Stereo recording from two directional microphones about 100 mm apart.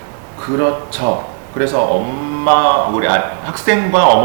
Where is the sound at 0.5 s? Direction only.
25° right (ahead or behind).